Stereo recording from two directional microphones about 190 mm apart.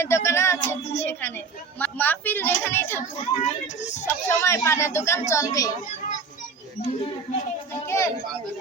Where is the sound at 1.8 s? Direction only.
10° left (ahead or behind).